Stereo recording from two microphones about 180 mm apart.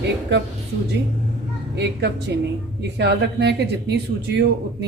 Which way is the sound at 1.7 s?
70° right (ahead or behind).